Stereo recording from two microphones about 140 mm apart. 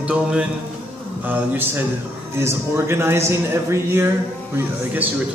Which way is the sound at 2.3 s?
20° right (ahead or behind).